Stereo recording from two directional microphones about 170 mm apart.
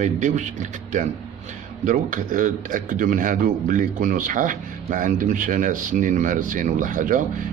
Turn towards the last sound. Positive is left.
turn(degrees=-50)  # may be behind; listen again after turning